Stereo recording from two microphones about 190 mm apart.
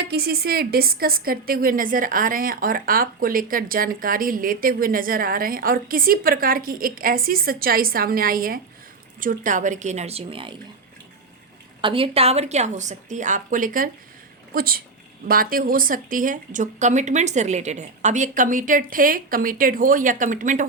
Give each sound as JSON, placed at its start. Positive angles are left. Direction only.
{"t": 0.1, "sound": "a woman's voice", "side_deg": -55}
{"t": 11.8, "sound": "a woman's voice", "side_deg": -25}